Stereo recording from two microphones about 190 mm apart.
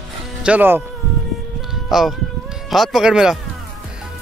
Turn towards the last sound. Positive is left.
turn(degrees=-5)  # may be behind; listen again after turning